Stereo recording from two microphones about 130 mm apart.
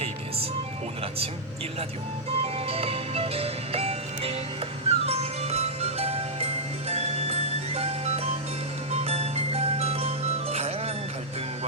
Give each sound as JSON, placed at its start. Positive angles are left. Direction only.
{"t": 2.4, "sound": "music", "side_deg": -50}